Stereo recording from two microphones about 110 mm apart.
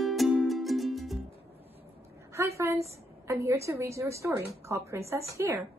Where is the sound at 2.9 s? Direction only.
25° right (ahead or behind).